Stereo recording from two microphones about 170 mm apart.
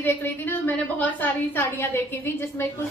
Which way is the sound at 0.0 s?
10° left (ahead or behind).